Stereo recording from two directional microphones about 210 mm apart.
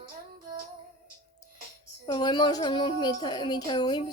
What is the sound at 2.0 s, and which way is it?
A woman's voice, 20° left (ahead or behind).